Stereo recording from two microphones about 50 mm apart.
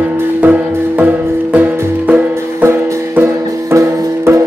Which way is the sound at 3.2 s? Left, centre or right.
Right.